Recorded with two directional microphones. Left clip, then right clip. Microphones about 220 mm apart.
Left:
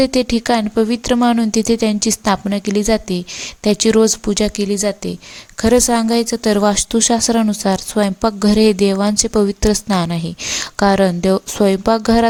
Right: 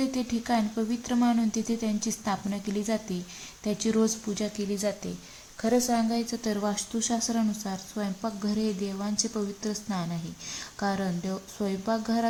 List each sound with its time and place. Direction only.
0.0 s speech: 40° left (ahead or behind)